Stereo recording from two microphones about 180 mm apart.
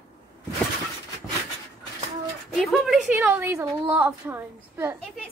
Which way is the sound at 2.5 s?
Centre (ahead or behind).